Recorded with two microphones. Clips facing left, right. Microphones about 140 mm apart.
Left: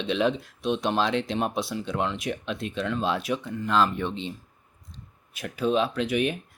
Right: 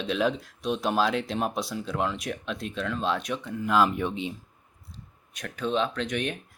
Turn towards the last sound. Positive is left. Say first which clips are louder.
# left 4 dB
turn(degrees=5)  # may be behind; listen again after turning